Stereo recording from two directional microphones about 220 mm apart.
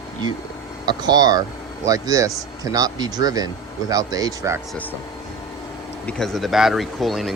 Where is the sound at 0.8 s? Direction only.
20° right (ahead or behind).